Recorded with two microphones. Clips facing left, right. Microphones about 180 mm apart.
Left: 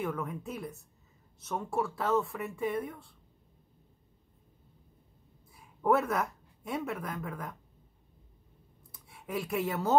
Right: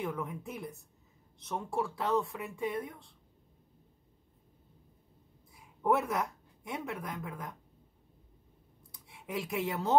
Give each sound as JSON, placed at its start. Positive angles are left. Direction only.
{"t": 0.0, "sound": "speech", "side_deg": 0}
{"t": 5.8, "sound": "speech", "side_deg": 0}
{"t": 9.2, "sound": "speech", "side_deg": 0}